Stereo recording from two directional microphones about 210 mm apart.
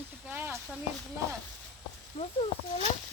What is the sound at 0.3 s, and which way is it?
Snake, 10° right (ahead or behind).